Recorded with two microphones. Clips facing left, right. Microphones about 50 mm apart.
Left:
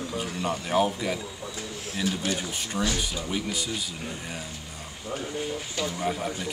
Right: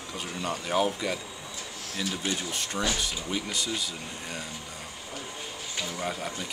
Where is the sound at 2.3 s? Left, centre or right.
Centre.